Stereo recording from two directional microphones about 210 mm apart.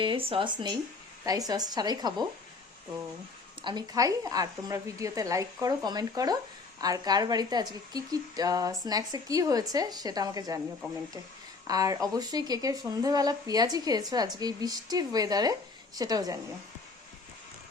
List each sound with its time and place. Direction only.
0.0 s a woman's voice: 25° right (ahead or behind)
3.6 s a woman's voice: 20° right (ahead or behind)
11.7 s a woman's voice: 15° right (ahead or behind)